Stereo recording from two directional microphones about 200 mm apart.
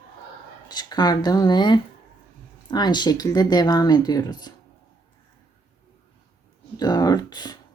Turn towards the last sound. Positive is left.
turn(degrees=20)  # may be behind; listen again after turning